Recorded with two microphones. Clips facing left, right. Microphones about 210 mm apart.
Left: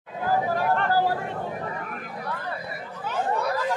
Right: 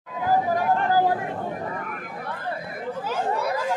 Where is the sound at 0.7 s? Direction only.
15° right (ahead or behind).